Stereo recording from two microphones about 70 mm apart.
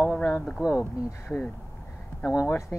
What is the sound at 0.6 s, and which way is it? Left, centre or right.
Speech, centre.